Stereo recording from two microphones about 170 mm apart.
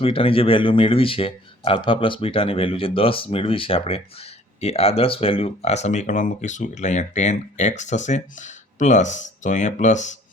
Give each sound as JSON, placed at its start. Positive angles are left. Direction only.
{"t": 0.0, "sound": "speech", "side_deg": 30}